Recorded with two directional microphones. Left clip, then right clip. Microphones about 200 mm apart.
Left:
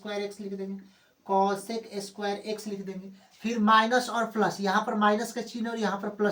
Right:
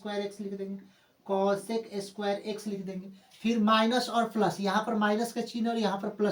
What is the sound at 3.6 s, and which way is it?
Speech, 20° right (ahead or behind).